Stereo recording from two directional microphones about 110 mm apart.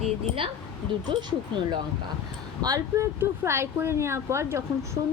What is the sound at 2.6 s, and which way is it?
A woman's voice, 30° right (ahead or behind).